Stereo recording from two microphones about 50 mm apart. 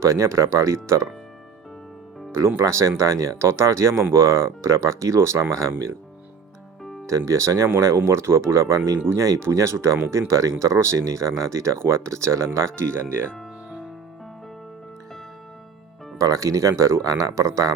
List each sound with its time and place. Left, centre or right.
0.0 s speech: right
2.6 s speech: right
7.1 s speech: right
12.9 s speech: right
16.1 s speech: right